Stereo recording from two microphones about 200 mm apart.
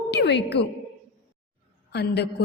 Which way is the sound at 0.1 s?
60° left (ahead or behind).